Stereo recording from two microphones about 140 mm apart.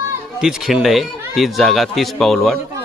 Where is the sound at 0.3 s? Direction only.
5° right (ahead or behind).